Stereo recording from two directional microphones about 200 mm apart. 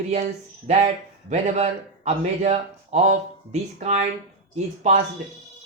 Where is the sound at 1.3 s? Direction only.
35° right (ahead or behind).